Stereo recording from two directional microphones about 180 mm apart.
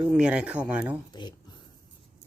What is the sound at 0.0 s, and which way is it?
Speech, 5° right (ahead or behind).